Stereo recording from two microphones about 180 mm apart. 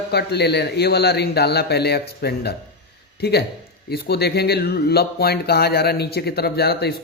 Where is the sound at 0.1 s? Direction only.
65° left (ahead or behind).